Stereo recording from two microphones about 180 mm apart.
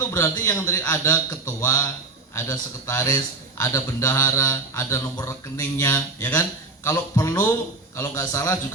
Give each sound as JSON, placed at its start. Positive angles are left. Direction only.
{"t": 0.0, "sound": "speech", "side_deg": 15}